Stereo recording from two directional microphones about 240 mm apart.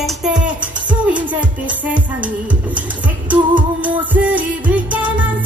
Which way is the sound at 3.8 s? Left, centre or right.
Centre.